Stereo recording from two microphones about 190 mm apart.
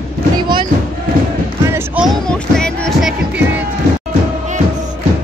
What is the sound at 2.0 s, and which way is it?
Music, 5° left (ahead or behind).